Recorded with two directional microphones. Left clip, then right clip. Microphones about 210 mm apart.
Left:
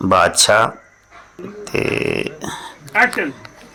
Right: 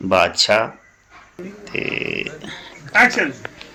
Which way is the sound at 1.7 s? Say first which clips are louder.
Left 4 dB; 25° left (ahead or behind).